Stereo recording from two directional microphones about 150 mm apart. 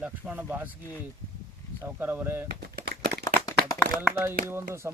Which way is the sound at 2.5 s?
90° right.